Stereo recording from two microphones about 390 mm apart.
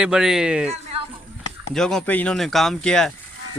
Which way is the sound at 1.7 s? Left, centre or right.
Centre.